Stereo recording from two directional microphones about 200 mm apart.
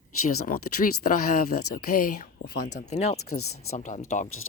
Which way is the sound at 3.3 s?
90° left.